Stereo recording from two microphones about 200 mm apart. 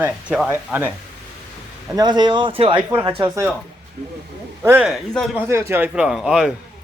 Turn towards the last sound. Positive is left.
turn(degrees=0)  # may be behind; listen again after turning